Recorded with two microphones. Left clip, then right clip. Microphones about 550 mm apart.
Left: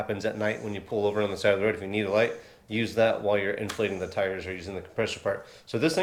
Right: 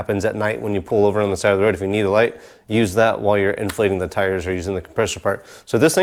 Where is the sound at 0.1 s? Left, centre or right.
Right.